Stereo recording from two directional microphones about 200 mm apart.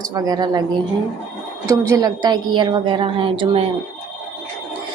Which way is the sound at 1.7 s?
15° right (ahead or behind).